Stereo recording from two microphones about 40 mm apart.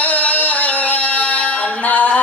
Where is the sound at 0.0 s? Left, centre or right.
Left.